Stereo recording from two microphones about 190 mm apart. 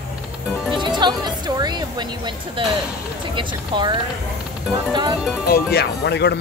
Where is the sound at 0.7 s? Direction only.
25° right (ahead or behind).